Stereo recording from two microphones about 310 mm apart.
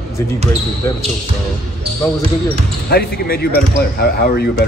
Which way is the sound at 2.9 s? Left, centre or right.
Left.